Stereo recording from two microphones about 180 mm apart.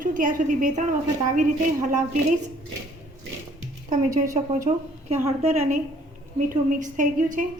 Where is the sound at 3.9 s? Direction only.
45° right (ahead or behind).